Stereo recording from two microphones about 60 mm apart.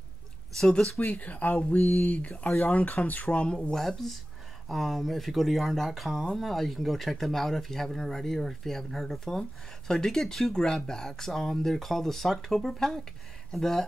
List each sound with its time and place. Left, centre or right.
0.6 s speech: centre
0.9 s speech: left
3.7 s speech: centre